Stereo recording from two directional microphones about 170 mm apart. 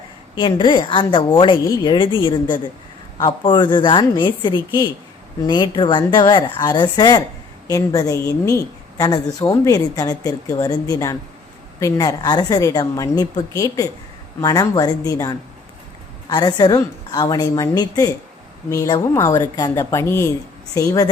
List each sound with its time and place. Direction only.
0.3 s a woman's voice: 25° left (ahead or behind)